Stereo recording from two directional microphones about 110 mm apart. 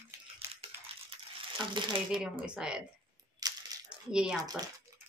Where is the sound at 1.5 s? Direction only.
45° right (ahead or behind).